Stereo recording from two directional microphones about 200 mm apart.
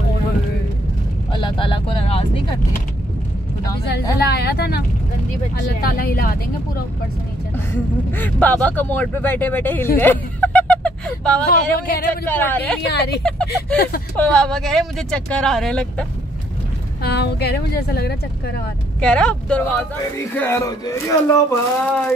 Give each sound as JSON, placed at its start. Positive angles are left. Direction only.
{"t": 1.3, "sound": "vehicle", "side_deg": 25}
{"t": 4.2, "sound": "speech", "side_deg": 55}
{"t": 7.5, "sound": "speech", "side_deg": 10}
{"t": 11.5, "sound": "speech", "side_deg": 45}
{"t": 12.3, "sound": "speech", "side_deg": 10}
{"t": 12.8, "sound": "speech", "side_deg": 55}
{"t": 13.2, "sound": "speech", "side_deg": 5}
{"t": 17.0, "sound": "speech", "side_deg": 55}
{"t": 18.9, "sound": "speech", "side_deg": 5}